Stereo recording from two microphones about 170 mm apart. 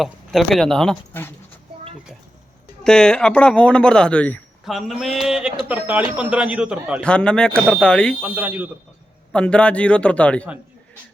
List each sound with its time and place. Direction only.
0.0 s speech: centre (ahead or behind)
2.8 s a man's voice: 5° left (ahead or behind)
7.0 s speech: 5° left (ahead or behind)
8.2 s a man's voice: 10° right (ahead or behind)
9.3 s a man's voice: 5° left (ahead or behind)